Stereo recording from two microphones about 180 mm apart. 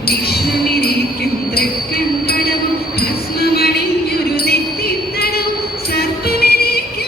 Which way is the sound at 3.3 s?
60° left (ahead or behind).